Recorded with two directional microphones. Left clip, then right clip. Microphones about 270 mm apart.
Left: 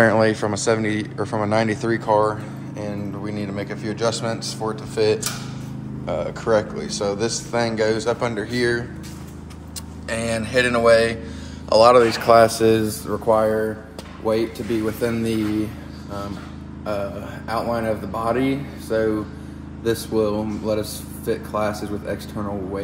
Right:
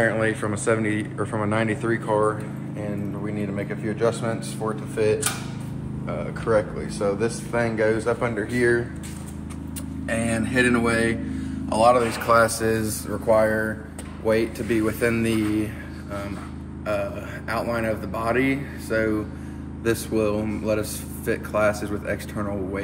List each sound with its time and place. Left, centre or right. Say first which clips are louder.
0.0 s a man's voice: left 6 dB; left; by 8.8 s centre
10.0 s a man's voice: left 1 dB; centre
11.8 s speech: left 4 dB; left
12.3 s a man's voice: left 3 dB; left
17.5 s a man's voice: left 2 dB; centre